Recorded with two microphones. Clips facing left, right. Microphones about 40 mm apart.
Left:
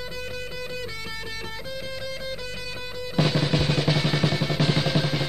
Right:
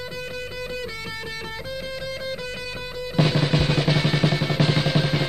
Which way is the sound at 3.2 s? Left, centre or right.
Right.